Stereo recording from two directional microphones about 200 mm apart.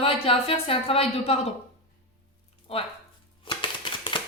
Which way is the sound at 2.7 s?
30° left (ahead or behind).